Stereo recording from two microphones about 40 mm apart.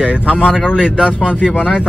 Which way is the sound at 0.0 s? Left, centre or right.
Right.